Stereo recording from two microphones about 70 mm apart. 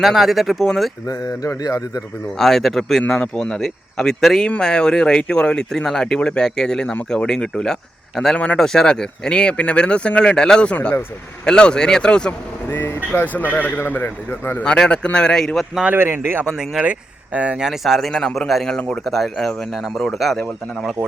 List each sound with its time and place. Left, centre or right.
0.0 s speech: centre
1.0 s speech: left
2.4 s speech: centre
12.7 s a man's voice: left
14.6 s speech: centre
15.9 s speech: right
16.5 s speech: centre
16.8 s speech: centre